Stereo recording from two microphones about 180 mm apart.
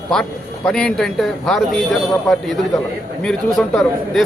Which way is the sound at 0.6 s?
5° left (ahead or behind).